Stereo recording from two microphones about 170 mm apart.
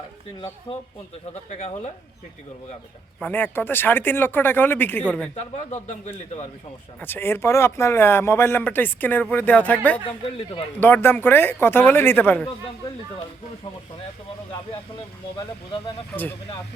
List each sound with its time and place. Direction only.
0.3 s a man's voice: 35° left (ahead or behind)
3.2 s speech: 10° left (ahead or behind)
5.4 s a man's voice: 40° left (ahead or behind)
7.0 s speech: 15° left (ahead or behind)
15.4 s speech: 30° left (ahead or behind)